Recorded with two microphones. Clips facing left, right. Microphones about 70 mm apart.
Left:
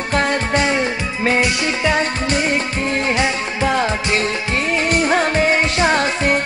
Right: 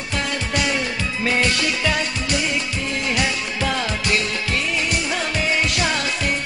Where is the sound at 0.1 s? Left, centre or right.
Left.